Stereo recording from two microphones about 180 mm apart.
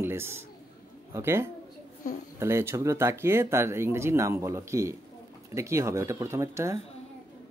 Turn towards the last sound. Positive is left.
turn(degrees=-15)  # may be behind; listen again after turning